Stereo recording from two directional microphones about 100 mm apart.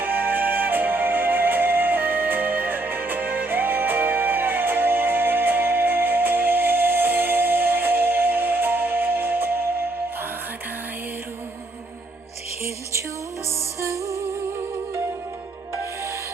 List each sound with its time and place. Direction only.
0.0 s music: 20° right (ahead or behind)
13.8 s music: 30° right (ahead or behind)